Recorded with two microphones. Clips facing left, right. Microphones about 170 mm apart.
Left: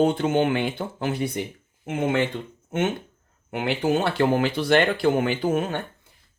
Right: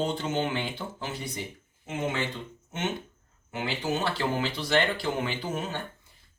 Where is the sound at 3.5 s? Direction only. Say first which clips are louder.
Left 7 dB; 60° left (ahead or behind).